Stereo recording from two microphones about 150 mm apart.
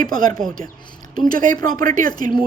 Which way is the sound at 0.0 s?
60° right (ahead or behind).